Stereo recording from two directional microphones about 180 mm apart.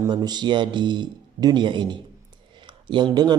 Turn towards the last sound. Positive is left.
turn(degrees=-25)  # may be behind; listen again after turning